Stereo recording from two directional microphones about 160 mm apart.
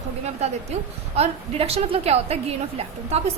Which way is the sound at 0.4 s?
40° right (ahead or behind).